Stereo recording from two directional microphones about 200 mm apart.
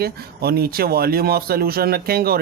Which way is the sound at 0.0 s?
50° right (ahead or behind).